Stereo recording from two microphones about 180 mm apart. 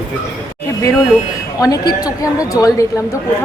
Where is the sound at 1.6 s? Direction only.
20° left (ahead or behind).